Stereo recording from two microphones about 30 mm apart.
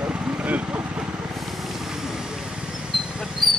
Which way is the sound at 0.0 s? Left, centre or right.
Right.